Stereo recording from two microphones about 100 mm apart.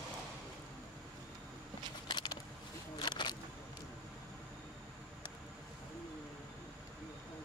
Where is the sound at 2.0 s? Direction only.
50° left (ahead or behind).